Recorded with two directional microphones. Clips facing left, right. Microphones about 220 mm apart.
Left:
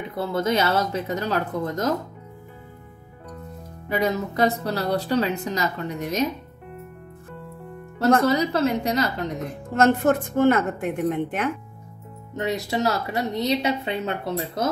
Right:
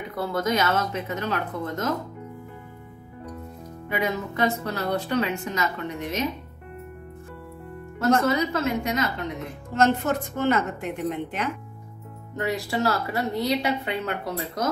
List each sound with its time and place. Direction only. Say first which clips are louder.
0.1 s a woman's voice: left 2 dB; 25° left (ahead or behind)
3.9 s a woman's voice: left 4 dB; 40° left (ahead or behind)
8.3 s a woman's voice: left 3 dB; 35° left (ahead or behind)
9.8 s a woman's voice: left 3 dB; 50° left (ahead or behind)
12.4 s a woman's voice: left 1 dB; 20° left (ahead or behind)